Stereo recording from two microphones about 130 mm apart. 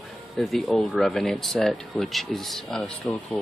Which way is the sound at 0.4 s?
Centre (ahead or behind).